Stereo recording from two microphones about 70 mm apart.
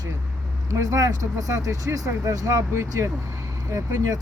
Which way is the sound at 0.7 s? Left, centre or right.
Right.